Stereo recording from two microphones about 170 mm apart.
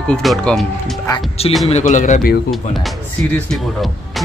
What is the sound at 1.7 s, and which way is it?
Speech, 45° left (ahead or behind).